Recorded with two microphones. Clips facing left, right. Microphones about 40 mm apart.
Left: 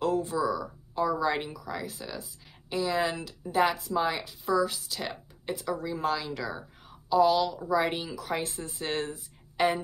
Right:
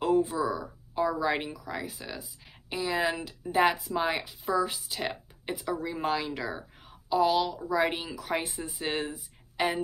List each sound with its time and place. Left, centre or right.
0.0 s a woman's voice: centre